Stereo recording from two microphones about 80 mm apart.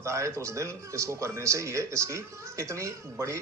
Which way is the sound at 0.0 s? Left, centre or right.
Right.